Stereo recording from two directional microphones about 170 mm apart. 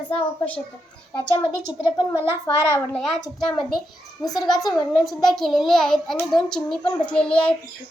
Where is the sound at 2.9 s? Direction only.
5° left (ahead or behind).